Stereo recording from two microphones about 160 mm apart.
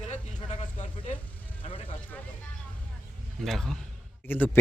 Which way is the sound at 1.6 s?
45° left (ahead or behind).